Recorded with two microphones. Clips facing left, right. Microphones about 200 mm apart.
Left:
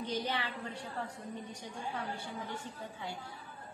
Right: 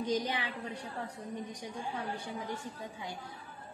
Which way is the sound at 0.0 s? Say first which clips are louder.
Right 3 dB; 15° right (ahead or behind).